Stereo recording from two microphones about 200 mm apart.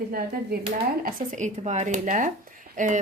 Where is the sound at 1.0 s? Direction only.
40° right (ahead or behind).